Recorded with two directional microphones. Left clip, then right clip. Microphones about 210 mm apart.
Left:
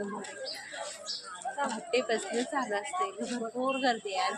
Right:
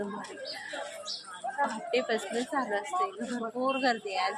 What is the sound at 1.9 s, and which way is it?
A man's voice, 5° right (ahead or behind).